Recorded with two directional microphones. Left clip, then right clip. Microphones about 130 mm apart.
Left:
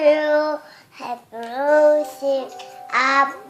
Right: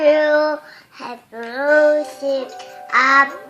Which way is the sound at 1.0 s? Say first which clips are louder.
Left 2 dB; 5° left (ahead or behind).